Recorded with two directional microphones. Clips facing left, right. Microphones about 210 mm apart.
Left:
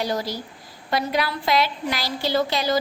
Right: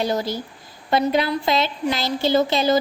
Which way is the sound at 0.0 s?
25° right (ahead or behind).